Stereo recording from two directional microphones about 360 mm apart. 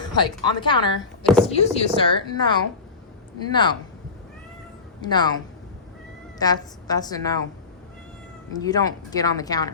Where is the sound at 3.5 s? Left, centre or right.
Centre.